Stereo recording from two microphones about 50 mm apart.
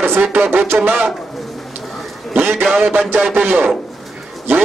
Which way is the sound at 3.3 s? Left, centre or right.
Right.